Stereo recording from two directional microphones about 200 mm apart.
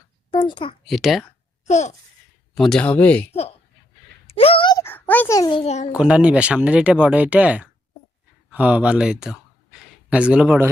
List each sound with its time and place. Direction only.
0.3 s a woman's voice: 25° left (ahead or behind)
0.9 s speech: centre (ahead or behind)
1.6 s babbling: 35° left (ahead or behind)
2.6 s speech: 5° left (ahead or behind)
4.3 s a sound: 30° left (ahead or behind)
6.0 s speech: 5° right (ahead or behind)